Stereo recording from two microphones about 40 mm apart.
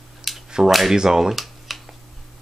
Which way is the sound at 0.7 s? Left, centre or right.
Centre.